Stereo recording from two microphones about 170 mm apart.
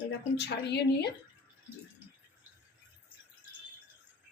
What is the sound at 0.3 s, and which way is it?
Speech, 80° left.